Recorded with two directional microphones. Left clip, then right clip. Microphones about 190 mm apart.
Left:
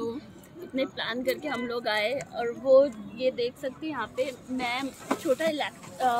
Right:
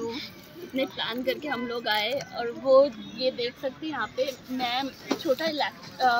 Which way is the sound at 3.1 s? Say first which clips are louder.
Left 1 dB; 60° left (ahead or behind).